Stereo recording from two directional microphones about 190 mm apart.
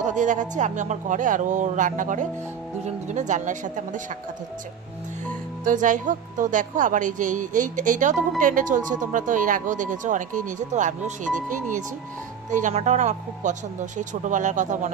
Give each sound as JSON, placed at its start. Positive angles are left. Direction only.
{"t": 0.0, "sound": "speech", "side_deg": -40}
{"t": 5.6, "sound": "a woman's voice", "side_deg": -45}